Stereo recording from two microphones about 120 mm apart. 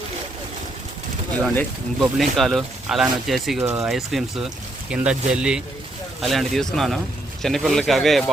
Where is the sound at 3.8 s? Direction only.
Centre (ahead or behind).